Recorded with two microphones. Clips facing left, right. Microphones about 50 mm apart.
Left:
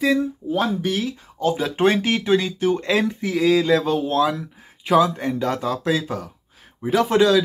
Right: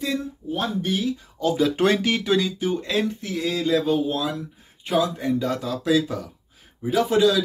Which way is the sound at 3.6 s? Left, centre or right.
Left.